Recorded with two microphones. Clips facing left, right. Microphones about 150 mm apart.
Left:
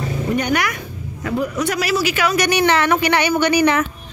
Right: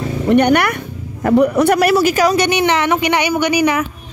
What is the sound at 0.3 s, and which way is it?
Speech, 65° right (ahead or behind).